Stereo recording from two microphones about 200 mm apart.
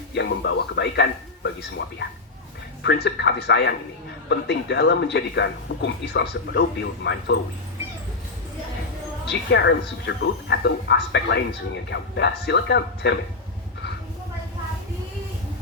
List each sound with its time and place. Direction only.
0.1 s speech: 60° left (ahead or behind)
9.2 s speech: 60° left (ahead or behind)